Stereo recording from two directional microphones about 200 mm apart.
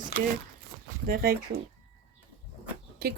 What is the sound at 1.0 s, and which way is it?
Speech, 45° right (ahead or behind).